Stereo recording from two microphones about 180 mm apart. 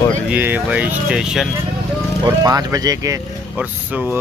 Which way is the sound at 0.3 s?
10° right (ahead or behind).